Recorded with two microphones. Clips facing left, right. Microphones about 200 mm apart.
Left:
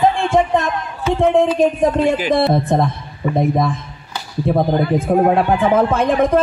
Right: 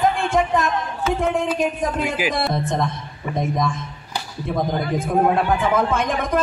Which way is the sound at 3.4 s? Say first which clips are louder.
Left 5 dB; 35° left (ahead or behind).